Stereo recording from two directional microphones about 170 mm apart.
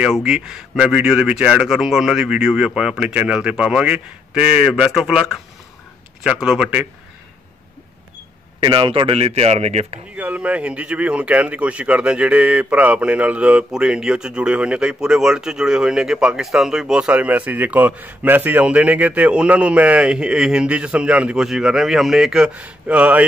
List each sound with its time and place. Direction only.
0.0 s speech: 5° right (ahead or behind)
8.5 s speech: 30° right (ahead or behind)
10.1 s speech: 10° right (ahead or behind)